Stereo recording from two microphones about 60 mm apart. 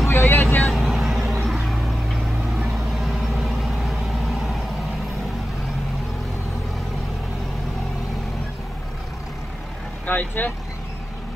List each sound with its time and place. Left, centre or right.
0.1 s vehicle: left
0.6 s vehicle: centre
3.0 s vehicle: centre
10.0 s vehicle: left